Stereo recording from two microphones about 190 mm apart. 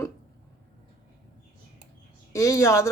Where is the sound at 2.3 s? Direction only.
15° left (ahead or behind).